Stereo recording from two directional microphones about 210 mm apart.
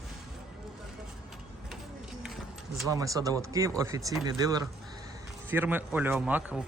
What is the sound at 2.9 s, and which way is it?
Speech, 15° right (ahead or behind).